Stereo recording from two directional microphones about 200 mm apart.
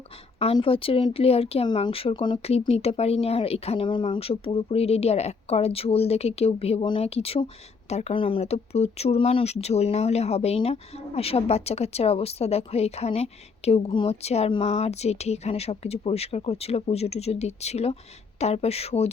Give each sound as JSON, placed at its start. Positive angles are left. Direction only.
{"t": 0.3, "sound": "speech", "side_deg": 30}